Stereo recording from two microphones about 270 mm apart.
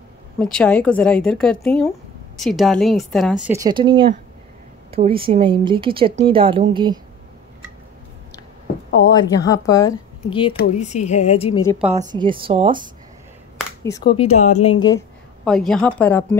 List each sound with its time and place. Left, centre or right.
0.4 s a woman's voice: centre
9.1 s speech: centre
10.5 s a woman's voice: left
11.9 s speech: right
13.8 s a woman's voice: centre
15.4 s speech: centre